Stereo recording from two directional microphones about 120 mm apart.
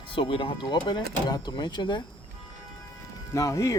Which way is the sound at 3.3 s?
25° left (ahead or behind).